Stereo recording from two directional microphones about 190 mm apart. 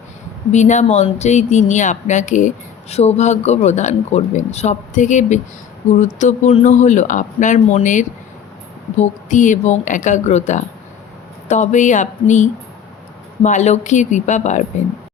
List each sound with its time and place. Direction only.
0.5 s speech: 40° left (ahead or behind)